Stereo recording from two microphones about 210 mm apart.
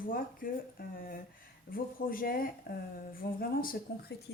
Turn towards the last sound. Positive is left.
turn(degrees=45)  # may be behind; listen again after turning